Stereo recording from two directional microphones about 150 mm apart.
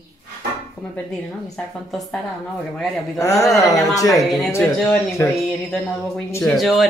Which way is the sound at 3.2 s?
20° left (ahead or behind).